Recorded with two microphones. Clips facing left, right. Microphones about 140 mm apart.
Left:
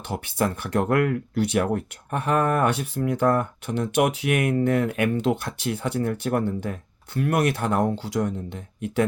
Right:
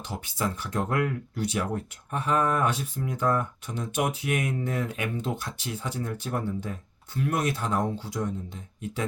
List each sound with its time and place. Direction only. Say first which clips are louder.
0.1 s speech: left 6 dB; 60° left (ahead or behind)